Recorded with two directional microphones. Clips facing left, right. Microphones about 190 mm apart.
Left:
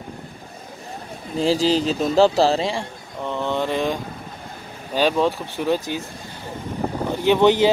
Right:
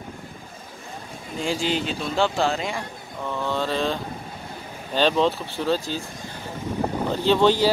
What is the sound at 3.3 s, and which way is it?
Mantra, 20° left (ahead or behind).